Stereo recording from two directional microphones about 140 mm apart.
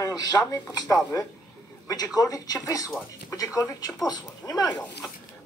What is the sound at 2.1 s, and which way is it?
Speech, 25° left (ahead or behind).